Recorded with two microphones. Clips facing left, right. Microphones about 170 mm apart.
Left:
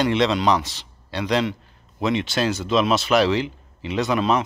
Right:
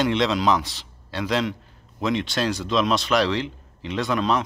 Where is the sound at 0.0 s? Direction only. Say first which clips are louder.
Left 2 dB; centre (ahead or behind).